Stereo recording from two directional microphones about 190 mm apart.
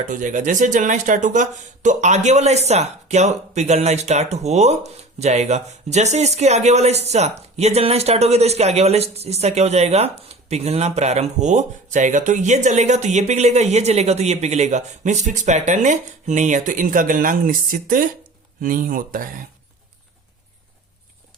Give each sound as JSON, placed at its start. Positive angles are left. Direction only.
{"t": 0.1, "sound": "speech", "side_deg": -40}